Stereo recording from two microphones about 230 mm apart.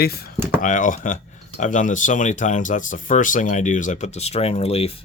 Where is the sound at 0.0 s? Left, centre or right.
Left.